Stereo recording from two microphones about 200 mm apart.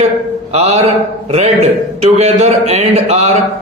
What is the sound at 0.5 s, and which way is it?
A man's voice, 35° right (ahead or behind).